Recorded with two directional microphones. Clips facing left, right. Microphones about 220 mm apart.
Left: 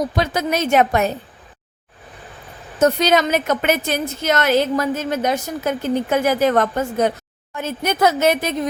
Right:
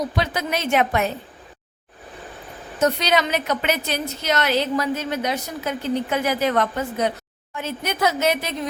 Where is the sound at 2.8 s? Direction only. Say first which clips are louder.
Left 4 dB; 45° left (ahead or behind).